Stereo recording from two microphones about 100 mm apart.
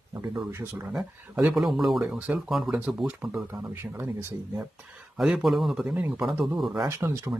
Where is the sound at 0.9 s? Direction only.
10° right (ahead or behind).